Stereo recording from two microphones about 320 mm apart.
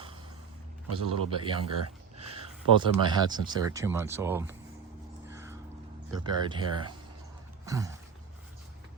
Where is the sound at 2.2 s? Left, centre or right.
Centre.